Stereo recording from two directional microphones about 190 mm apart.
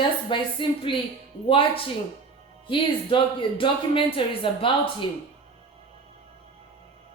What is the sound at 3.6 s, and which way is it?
Speech, 25° left (ahead or behind).